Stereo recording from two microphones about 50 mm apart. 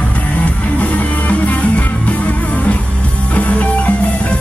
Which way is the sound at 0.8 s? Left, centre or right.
Left.